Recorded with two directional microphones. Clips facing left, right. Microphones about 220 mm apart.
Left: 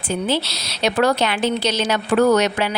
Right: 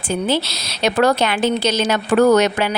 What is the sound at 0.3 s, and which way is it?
A woman's voice, 50° right (ahead or behind).